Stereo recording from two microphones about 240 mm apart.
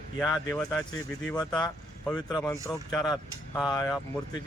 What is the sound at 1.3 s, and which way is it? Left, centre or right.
Speech, centre.